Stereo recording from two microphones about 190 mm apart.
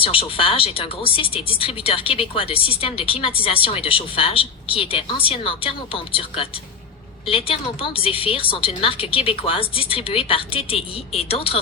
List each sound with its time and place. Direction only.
0.0 s speech: 30° left (ahead or behind)